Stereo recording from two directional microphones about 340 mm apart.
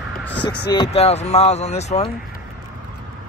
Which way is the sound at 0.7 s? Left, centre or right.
Centre.